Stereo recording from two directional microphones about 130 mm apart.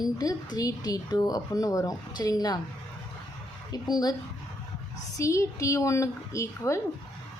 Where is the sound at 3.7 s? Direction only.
30° left (ahead or behind).